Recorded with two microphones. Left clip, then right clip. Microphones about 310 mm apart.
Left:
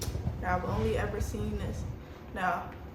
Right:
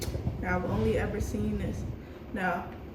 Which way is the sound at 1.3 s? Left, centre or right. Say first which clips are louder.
Right 3 dB; centre.